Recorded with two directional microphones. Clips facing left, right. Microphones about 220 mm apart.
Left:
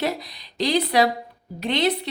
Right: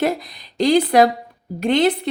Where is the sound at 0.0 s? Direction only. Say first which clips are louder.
Right 5 dB; 50° right (ahead or behind).